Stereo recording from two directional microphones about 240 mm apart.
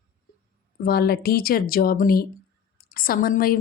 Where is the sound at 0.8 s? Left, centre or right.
Left.